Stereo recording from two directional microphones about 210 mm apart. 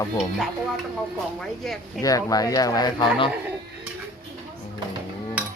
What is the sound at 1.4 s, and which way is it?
Speech, centre (ahead or behind).